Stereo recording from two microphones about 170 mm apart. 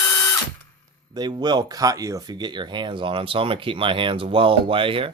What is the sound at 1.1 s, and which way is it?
Speech, 25° right (ahead or behind).